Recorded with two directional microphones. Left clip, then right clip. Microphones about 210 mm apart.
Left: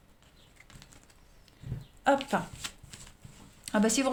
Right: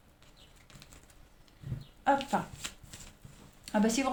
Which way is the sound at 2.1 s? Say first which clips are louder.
Left 2 dB; 45° left (ahead or behind).